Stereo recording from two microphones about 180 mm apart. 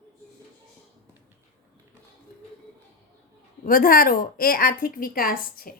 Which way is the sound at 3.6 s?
55° left (ahead or behind).